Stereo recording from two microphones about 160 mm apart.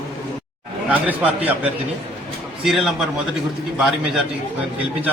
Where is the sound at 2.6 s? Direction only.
Centre (ahead or behind).